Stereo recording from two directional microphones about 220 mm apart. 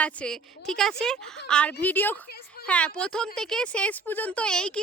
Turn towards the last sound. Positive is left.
turn(degrees=5)  # may be behind; listen again after turning